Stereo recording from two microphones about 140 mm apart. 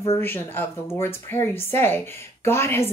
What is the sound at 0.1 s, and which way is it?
A woman's voice, 15° left (ahead or behind).